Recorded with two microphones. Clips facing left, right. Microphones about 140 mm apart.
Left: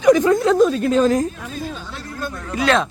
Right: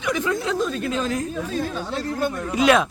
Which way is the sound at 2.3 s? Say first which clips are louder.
Even; 15° right (ahead or behind).